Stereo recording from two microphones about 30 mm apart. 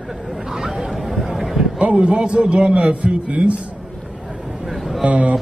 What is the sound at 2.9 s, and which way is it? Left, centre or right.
Speech, right.